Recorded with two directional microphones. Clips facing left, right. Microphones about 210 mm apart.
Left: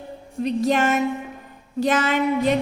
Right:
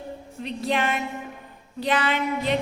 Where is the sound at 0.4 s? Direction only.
45° left (ahead or behind).